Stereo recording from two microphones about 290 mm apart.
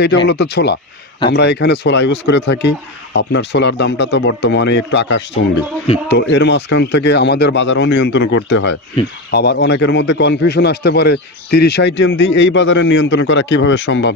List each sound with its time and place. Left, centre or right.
0.3 s a man's voice: left